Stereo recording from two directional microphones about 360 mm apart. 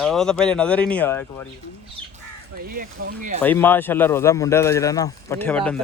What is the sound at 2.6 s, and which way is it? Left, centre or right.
Speech, right.